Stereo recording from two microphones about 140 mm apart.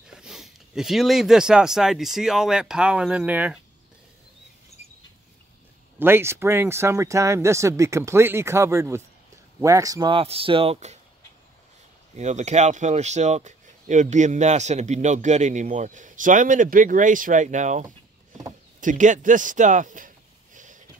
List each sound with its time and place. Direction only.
0.0 s speech: 5° right (ahead or behind)
5.9 s speech: 15° right (ahead or behind)
10.2 s speech: 40° right (ahead or behind)
12.2 s speech: 55° right (ahead or behind)
20.5 s a sound: 65° right (ahead or behind)